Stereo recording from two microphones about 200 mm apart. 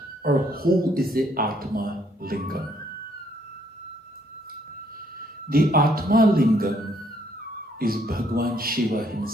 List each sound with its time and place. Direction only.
0.3 s a man's voice: 45° right (ahead or behind)
5.5 s a man's voice: 45° right (ahead or behind)
7.8 s a man's voice: 45° right (ahead or behind)